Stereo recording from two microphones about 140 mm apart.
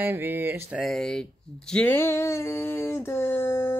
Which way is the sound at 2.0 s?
15° left (ahead or behind).